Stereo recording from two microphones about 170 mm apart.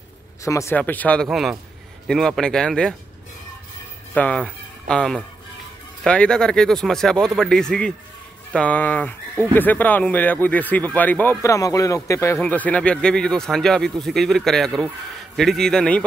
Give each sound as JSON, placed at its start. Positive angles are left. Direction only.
{"t": 0.4, "sound": "speech", "side_deg": 20}
{"t": 4.1, "sound": "speech", "side_deg": 5}